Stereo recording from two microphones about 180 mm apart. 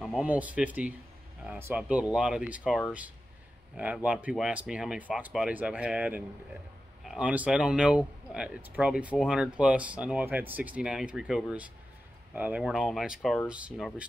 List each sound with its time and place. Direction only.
0.0 s speech: 5° right (ahead or behind)